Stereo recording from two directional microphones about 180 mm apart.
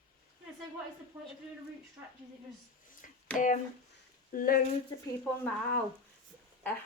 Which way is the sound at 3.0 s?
45° left (ahead or behind).